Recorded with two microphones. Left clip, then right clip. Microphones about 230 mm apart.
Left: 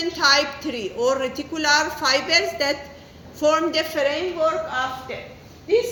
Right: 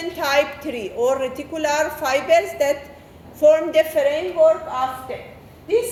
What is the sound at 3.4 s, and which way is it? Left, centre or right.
Speech, left.